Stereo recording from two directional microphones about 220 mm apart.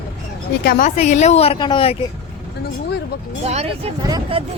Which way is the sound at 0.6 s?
40° left (ahead or behind).